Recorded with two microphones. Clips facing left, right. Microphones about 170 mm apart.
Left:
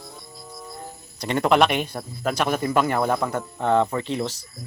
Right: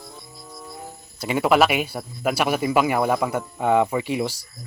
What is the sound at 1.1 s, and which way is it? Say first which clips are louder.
Speech: right 1 dB; 5° right (ahead or behind).